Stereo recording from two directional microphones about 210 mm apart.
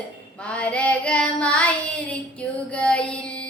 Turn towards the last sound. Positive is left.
turn(degrees=5)  # may be behind; listen again after turning